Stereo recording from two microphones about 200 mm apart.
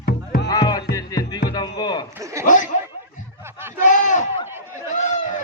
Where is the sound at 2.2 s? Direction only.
15° right (ahead or behind).